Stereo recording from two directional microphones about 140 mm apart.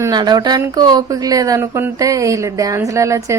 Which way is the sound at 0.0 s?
30° right (ahead or behind).